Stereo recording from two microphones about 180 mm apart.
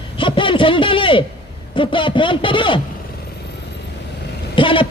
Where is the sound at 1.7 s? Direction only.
30° left (ahead or behind).